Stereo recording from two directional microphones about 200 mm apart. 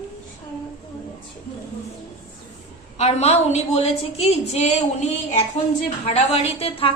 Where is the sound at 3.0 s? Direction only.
30° left (ahead or behind).